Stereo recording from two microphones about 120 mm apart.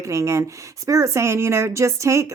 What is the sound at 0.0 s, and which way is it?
Speech, 25° right (ahead or behind).